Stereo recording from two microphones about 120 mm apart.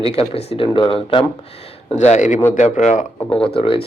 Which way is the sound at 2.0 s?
75° left (ahead or behind).